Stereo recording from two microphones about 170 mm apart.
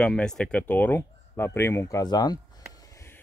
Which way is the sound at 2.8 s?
15° left (ahead or behind).